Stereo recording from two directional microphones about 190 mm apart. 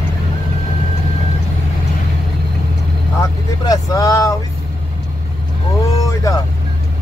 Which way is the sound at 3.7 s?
15° left (ahead or behind).